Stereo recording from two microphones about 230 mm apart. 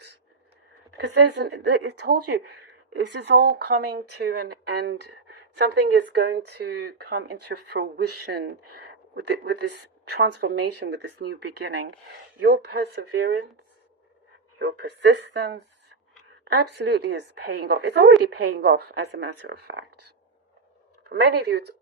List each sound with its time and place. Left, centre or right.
0.9 s a woman's voice: right
14.6 s a woman's voice: right
21.1 s a woman's voice: right